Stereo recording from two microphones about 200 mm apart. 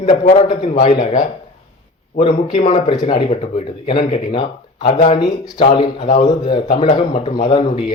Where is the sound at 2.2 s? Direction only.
30° left (ahead or behind).